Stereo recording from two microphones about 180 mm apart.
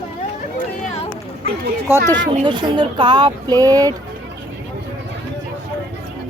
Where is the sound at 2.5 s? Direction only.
25° right (ahead or behind).